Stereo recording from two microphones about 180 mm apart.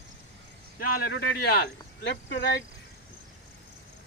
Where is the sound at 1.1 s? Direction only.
70° left (ahead or behind).